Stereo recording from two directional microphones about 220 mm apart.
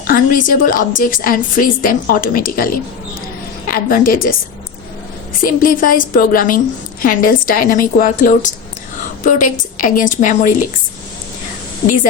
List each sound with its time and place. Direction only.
0.1 s a woman's voice: 40° left (ahead or behind)
3.7 s a woman's voice: 40° left (ahead or behind)
5.4 s a woman's voice: 40° left (ahead or behind)